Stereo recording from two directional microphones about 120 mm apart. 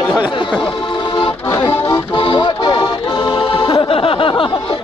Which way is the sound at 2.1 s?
45° left (ahead or behind).